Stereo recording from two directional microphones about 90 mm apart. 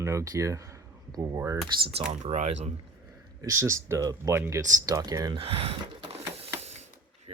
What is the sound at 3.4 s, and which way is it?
Speech, 35° right (ahead or behind).